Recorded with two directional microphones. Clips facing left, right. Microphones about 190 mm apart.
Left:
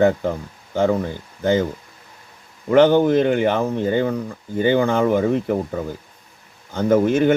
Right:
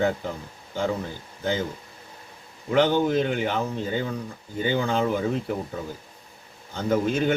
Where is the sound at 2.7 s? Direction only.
55° left (ahead or behind).